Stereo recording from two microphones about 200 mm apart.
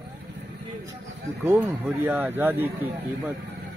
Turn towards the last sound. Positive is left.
turn(degrees=-10)  # may be behind; listen again after turning